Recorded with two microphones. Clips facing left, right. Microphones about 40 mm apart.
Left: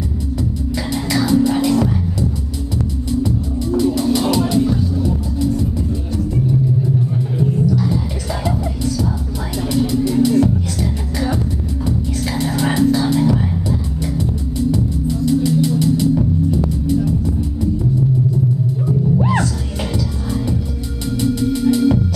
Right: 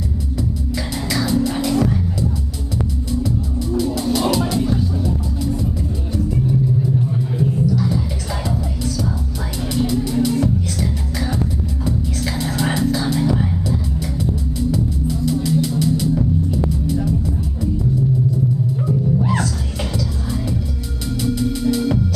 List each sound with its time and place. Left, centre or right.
0.9 s music: centre
3.2 s music: centre
7.3 s music: centre
10.0 s music: centre
19.2 s music: centre
21.2 s music: centre